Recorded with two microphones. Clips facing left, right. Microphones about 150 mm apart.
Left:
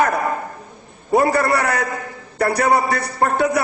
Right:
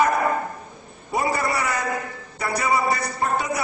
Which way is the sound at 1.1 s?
60° left (ahead or behind).